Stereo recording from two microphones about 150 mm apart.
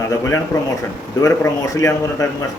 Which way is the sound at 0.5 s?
25° left (ahead or behind).